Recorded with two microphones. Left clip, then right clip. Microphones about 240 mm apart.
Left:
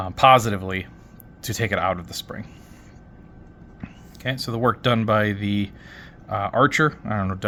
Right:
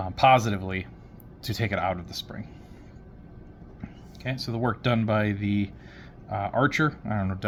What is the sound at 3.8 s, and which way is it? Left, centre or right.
Speech, left.